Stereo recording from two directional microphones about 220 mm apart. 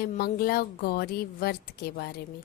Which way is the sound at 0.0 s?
40° left (ahead or behind).